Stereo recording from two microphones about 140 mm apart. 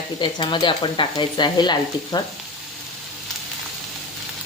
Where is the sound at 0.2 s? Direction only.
35° left (ahead or behind).